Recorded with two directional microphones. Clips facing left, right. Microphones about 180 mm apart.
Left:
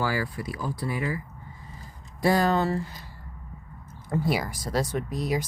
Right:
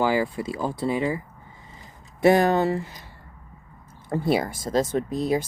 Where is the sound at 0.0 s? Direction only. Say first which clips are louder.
Right 6 dB; 20° right (ahead or behind).